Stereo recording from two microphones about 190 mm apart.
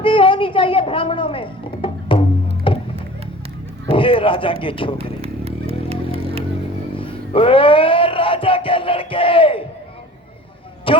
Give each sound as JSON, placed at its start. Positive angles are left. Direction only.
{"t": 0.0, "sound": "a sound", "side_deg": 25}
{"t": 2.7, "sound": "music", "side_deg": 25}
{"t": 3.8, "sound": "speech", "side_deg": 25}
{"t": 4.9, "sound": "music", "side_deg": -30}
{"t": 7.0, "sound": "a sound", "side_deg": 30}
{"t": 10.9, "sound": "a man's voice", "side_deg": 25}